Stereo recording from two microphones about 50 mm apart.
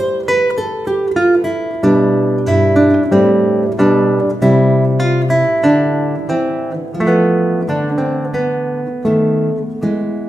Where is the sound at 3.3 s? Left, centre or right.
Centre.